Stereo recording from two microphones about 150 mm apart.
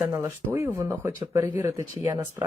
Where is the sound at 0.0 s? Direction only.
20° right (ahead or behind).